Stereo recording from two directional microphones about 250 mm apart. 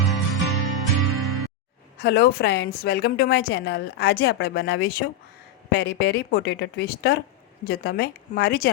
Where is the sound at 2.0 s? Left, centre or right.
Left.